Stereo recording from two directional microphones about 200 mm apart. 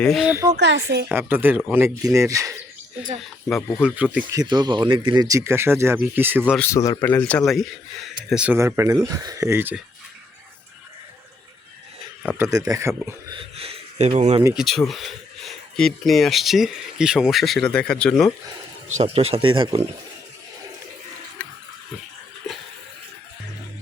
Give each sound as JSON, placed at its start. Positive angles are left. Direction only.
{"t": 0.0, "sound": "speech", "side_deg": 0}
{"t": 0.5, "sound": "speech", "side_deg": -60}
{"t": 1.0, "sound": "speech", "side_deg": -5}
{"t": 3.2, "sound": "speech", "side_deg": -5}
{"t": 4.4, "sound": "speech", "side_deg": -20}
{"t": 6.6, "sound": "speech", "side_deg": 15}
{"t": 12.4, "sound": "speech", "side_deg": -15}
{"t": 13.6, "sound": "a sound", "side_deg": -30}
{"t": 14.5, "sound": "speech", "side_deg": 0}
{"t": 18.9, "sound": "speech", "side_deg": -35}
{"t": 21.4, "sound": "pig", "side_deg": 5}